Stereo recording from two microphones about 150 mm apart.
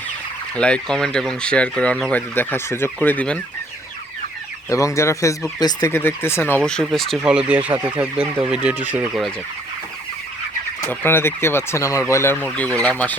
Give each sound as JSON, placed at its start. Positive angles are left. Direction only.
{"t": 0.5, "sound": "speech", "side_deg": 5}
{"t": 4.7, "sound": "speech", "side_deg": 20}
{"t": 5.9, "sound": "speech", "side_deg": 15}
{"t": 10.8, "sound": "speech", "side_deg": 15}